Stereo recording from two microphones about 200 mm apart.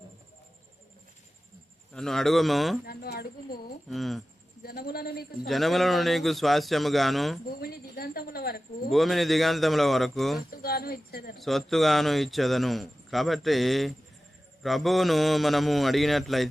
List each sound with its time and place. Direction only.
1.9 s a man's voice: centre (ahead or behind)
2.8 s a sound: 50° left (ahead or behind)
3.8 s a man's voice: centre (ahead or behind)
4.6 s speech: 50° left (ahead or behind)
5.5 s a man's voice: centre (ahead or behind)
7.6 s a woman's voice: 50° left (ahead or behind)
8.9 s a man's voice: centre (ahead or behind)
10.5 s speech: 50° left (ahead or behind)
11.3 s a man's voice: centre (ahead or behind)